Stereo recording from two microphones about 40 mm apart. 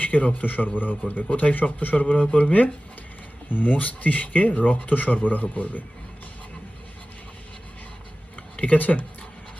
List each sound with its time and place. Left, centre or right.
0.0 s speech: left
2.2 s speech: left
3.5 s speech: left
8.5 s speech: left